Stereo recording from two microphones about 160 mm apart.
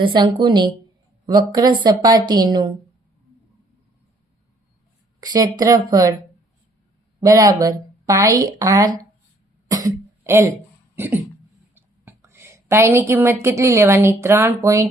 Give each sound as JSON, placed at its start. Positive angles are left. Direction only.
{"t": 0.0, "sound": "a woman's voice", "side_deg": -30}
{"t": 5.2, "sound": "a woman's voice", "side_deg": -25}
{"t": 7.2, "sound": "a woman's voice", "side_deg": -20}
{"t": 9.6, "sound": "cough", "side_deg": -20}
{"t": 10.9, "sound": "a sound", "side_deg": -10}
{"t": 11.7, "sound": "a woman's voice", "side_deg": -15}